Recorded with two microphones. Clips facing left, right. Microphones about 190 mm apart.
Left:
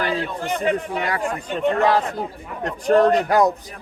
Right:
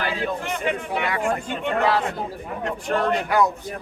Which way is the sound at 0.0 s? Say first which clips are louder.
Left 2 dB; 40° left (ahead or behind).